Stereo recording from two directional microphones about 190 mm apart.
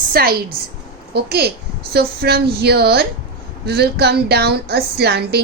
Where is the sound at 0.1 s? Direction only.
55° right (ahead or behind).